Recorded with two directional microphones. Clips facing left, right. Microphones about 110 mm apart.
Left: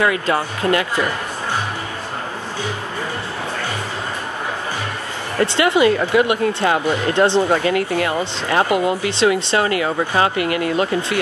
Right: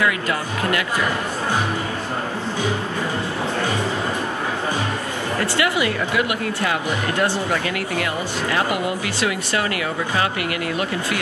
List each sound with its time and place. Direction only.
0.0 s speech: 30° left (ahead or behind)
5.4 s speech: 25° left (ahead or behind)